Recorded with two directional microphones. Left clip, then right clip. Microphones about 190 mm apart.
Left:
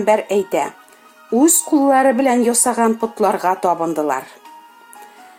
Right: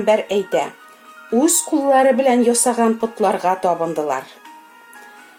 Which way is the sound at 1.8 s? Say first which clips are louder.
Right 1 dB; 40° left (ahead or behind).